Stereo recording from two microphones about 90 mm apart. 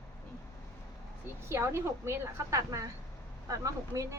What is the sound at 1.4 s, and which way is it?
A woman's voice, 30° right (ahead or behind).